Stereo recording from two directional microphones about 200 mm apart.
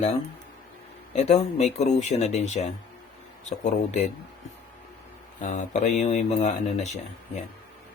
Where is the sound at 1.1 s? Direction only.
35° left (ahead or behind).